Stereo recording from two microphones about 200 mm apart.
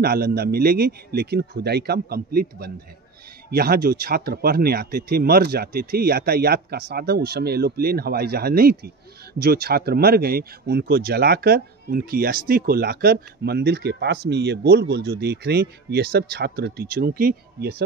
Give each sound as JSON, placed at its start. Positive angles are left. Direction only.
{"t": 0.0, "sound": "speech", "side_deg": -50}